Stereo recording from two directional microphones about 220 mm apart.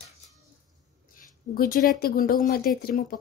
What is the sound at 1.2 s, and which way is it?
Speech, 40° left (ahead or behind).